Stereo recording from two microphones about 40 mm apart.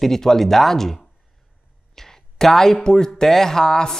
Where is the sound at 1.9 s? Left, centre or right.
Centre.